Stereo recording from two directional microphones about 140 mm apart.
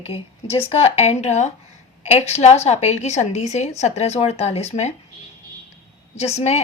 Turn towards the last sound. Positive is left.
turn(degrees=50)  # may be behind; listen again after turning